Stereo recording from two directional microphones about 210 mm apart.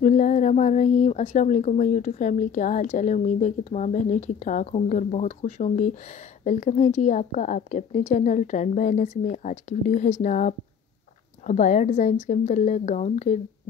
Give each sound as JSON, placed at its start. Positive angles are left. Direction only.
{"t": 0.0, "sound": "a woman's voice", "side_deg": 35}